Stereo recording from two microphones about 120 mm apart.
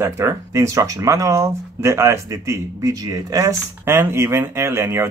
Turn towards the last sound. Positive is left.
turn(degrees=-20)  # may be behind; listen again after turning